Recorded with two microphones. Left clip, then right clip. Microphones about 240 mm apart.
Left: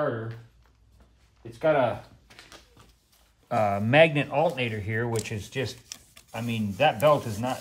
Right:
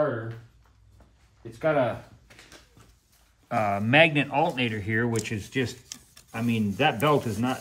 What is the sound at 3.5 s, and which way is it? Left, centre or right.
Speech, left.